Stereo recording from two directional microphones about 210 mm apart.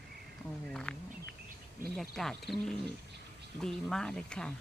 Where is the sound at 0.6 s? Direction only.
5° left (ahead or behind).